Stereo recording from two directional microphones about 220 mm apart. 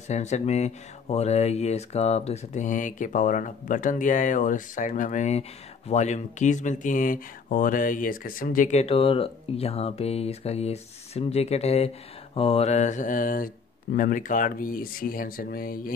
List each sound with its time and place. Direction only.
0.1 s speech: 30° left (ahead or behind)